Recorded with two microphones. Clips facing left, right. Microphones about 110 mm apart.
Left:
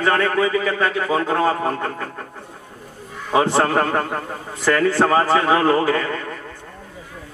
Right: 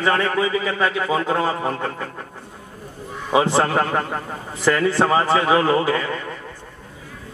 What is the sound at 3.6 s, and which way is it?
A man's voice, 15° right (ahead or behind).